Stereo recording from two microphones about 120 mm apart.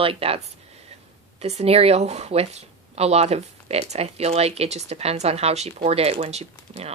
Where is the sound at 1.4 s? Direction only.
60° right (ahead or behind).